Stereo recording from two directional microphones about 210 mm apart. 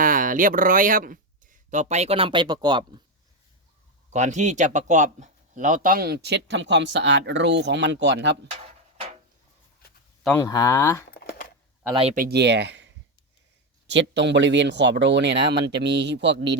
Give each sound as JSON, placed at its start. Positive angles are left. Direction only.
{"t": 0.0, "sound": "speech", "side_deg": -40}
{"t": 4.1, "sound": "speech", "side_deg": -35}
{"t": 10.2, "sound": "speech", "side_deg": 15}
{"t": 11.1, "sound": "a sound", "side_deg": 45}
{"t": 12.1, "sound": "speech", "side_deg": -45}